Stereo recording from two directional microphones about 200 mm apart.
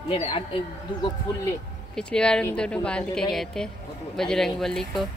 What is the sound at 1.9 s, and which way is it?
A woman's voice, 5° left (ahead or behind).